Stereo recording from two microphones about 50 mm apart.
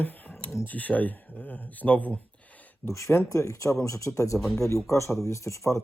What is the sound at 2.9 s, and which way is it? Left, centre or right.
Speech, left.